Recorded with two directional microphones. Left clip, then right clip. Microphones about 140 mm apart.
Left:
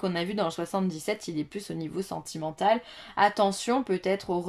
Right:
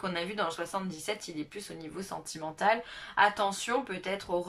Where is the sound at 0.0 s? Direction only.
35° left (ahead or behind).